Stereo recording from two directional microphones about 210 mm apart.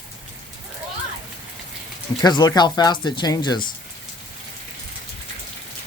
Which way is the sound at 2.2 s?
20° left (ahead or behind).